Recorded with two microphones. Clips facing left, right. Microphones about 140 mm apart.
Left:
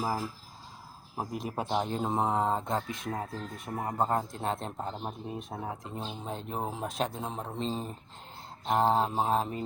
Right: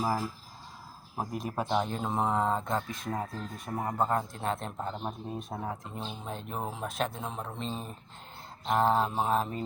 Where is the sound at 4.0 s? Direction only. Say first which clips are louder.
Left 1 dB; 30° left (ahead or behind).